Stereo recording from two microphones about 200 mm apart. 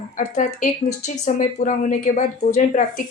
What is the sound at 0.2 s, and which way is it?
A woman's voice, 35° left (ahead or behind).